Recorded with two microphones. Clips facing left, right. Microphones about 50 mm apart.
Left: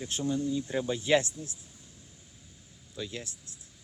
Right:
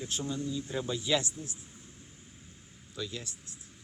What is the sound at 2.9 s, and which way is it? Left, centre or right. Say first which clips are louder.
Speech: left 1 dB; left.